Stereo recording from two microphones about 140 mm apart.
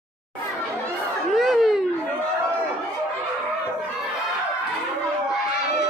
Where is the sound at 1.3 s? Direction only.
Centre (ahead or behind).